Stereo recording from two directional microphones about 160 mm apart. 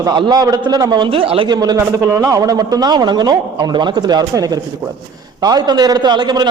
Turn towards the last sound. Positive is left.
turn(degrees=-25)  # may be behind; listen again after turning